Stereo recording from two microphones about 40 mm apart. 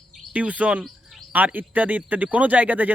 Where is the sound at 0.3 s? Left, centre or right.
Right.